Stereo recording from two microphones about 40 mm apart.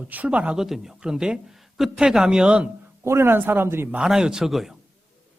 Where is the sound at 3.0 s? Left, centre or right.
Right.